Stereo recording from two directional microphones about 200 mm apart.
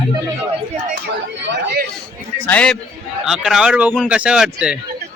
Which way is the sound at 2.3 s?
10° left (ahead or behind).